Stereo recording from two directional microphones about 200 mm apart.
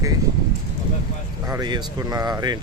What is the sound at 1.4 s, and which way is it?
Speech, 20° right (ahead or behind).